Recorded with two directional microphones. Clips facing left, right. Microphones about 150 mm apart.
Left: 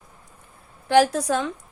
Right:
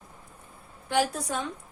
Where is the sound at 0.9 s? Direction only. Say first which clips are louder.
Left 9 dB; 85° left.